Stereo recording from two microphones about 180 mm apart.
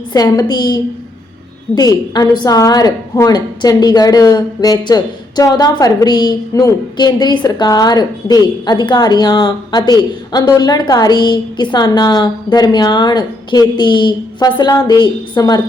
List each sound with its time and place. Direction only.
0.1 s a woman's voice: 20° left (ahead or behind)